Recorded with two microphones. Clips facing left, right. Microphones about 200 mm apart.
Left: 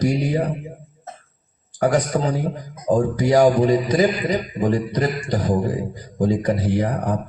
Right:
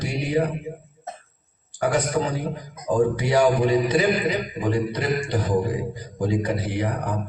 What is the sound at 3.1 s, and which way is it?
Mantra, 40° left (ahead or behind).